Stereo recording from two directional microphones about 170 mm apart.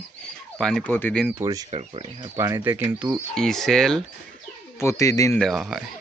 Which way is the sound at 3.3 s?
5° left (ahead or behind).